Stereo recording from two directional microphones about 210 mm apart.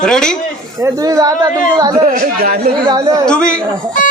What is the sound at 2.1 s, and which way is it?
Speech, 45° right (ahead or behind).